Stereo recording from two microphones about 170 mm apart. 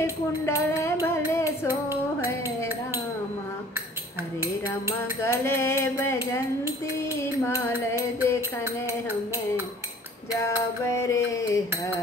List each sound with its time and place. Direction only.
0.0 s speech: 20° left (ahead or behind)
1.0 s music: 15° left (ahead or behind)
4.8 s music: 15° left (ahead or behind)
10.9 s music: 15° left (ahead or behind)